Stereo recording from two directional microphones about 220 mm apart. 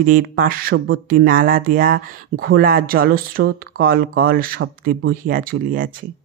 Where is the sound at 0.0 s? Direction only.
40° right (ahead or behind).